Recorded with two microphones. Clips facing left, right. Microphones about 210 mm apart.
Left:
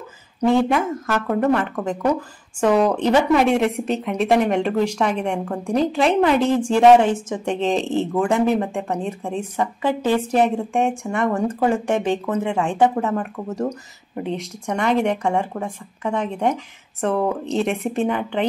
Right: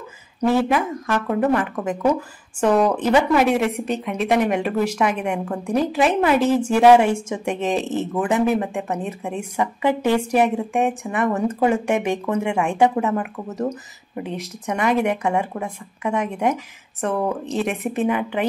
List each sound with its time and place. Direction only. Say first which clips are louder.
0.5 s speech: left 1 dB; 5° right (ahead or behind)
2.6 s speech: even; 10° left (ahead or behind)
2.9 s speech: left 1 dB; 5° right (ahead or behind)